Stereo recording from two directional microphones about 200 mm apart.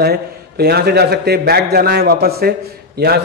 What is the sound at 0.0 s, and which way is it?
A man's voice, 55° right (ahead or behind).